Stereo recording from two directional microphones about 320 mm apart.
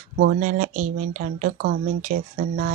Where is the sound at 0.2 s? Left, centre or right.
Right.